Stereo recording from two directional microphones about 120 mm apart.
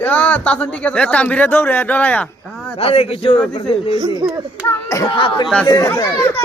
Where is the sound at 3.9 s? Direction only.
35° right (ahead or behind).